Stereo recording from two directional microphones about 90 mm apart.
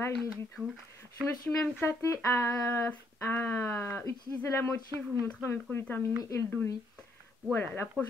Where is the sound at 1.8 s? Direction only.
30° left (ahead or behind).